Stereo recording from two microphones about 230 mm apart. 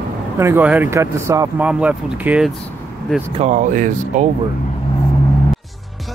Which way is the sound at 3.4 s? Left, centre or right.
Right.